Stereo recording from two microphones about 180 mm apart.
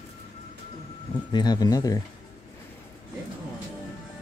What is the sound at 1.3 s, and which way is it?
Speech, 20° left (ahead or behind).